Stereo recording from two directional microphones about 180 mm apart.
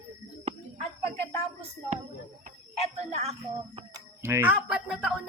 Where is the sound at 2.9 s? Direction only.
35° right (ahead or behind).